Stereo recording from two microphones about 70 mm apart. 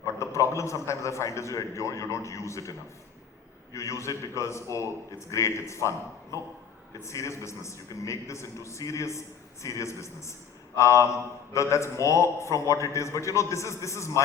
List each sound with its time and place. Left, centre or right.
0.0 s a man's voice: left